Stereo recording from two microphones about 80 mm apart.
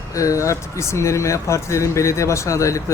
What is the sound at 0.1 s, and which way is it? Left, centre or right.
Speech, left.